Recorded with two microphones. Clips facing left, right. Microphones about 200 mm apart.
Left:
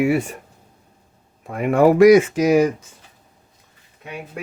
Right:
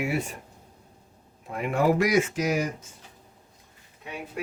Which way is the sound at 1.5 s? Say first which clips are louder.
Left 8 dB; 60° left (ahead or behind).